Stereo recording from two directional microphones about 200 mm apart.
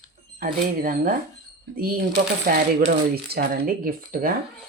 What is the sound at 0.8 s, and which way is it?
Speech, 45° right (ahead or behind).